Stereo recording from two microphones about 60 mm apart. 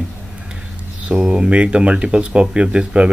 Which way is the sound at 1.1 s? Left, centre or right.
Centre.